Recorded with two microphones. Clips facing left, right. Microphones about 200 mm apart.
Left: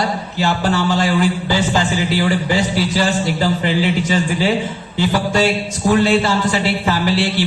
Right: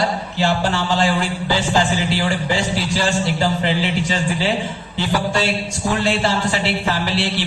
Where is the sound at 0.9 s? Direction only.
50° left (ahead or behind).